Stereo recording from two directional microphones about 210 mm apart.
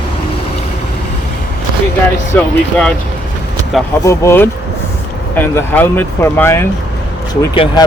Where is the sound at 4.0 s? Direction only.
15° left (ahead or behind).